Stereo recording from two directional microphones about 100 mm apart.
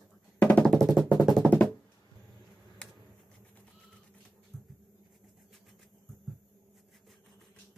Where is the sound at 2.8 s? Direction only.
10° left (ahead or behind).